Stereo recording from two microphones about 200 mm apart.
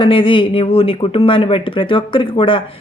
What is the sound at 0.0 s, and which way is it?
A woman's voice, 25° left (ahead or behind).